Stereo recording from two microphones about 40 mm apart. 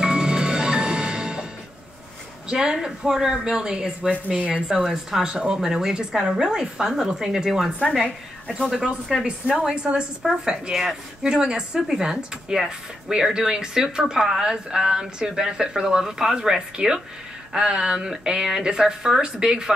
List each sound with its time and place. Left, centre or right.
0.0 s music: centre
2.4 s speech: centre
4.7 s speech: centre
7.9 s a woman's voice: centre
8.8 s a woman's voice: right
10.2 s speech: centre